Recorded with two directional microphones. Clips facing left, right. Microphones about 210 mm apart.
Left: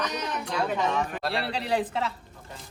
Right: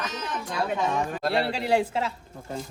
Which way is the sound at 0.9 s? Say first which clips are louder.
Right 2 dB; 45° right (ahead or behind).